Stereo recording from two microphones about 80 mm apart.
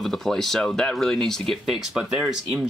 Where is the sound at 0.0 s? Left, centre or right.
Centre.